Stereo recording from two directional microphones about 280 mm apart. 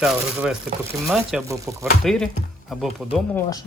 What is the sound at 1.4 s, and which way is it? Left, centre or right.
Speech, centre.